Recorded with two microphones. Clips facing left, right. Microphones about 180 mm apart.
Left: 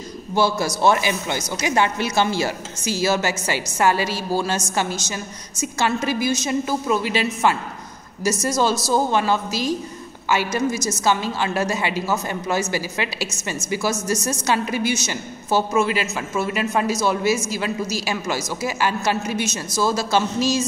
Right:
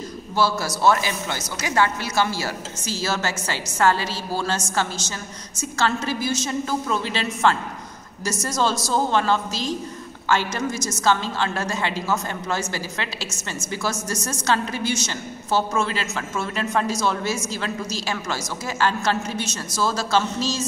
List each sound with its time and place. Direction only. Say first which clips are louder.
0.3 s a woman's voice: left 3 dB; 15° left (ahead or behind)